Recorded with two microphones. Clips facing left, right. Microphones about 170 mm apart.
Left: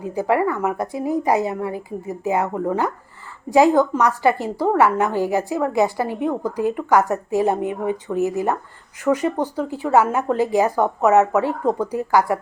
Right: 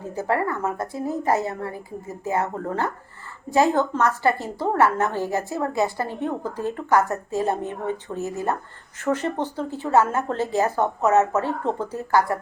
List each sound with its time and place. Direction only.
0.0 s a woman's voice: 15° left (ahead or behind)